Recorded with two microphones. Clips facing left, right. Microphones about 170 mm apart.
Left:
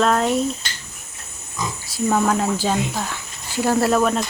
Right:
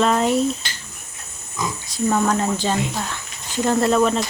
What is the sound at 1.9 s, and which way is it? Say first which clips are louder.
Speech: left 1 dB; centre (ahead or behind).